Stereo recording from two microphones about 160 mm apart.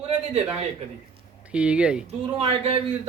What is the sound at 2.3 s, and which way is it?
Speech, 40° right (ahead or behind).